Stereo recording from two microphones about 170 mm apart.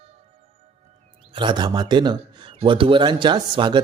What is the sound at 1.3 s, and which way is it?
A man's voice, 25° right (ahead or behind).